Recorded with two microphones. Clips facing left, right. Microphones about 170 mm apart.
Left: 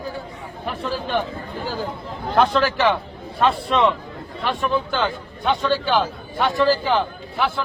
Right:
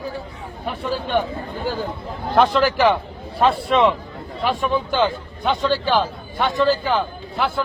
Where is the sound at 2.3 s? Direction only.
Centre (ahead or behind).